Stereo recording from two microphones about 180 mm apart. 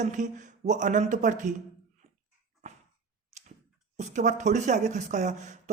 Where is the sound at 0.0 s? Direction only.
45° right (ahead or behind).